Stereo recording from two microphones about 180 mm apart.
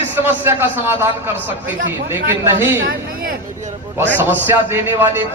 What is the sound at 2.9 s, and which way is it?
Speech, 55° right (ahead or behind).